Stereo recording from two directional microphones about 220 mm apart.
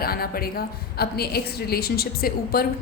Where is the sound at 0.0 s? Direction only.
45° left (ahead or behind).